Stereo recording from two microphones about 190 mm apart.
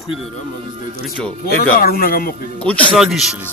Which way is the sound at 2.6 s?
Centre (ahead or behind).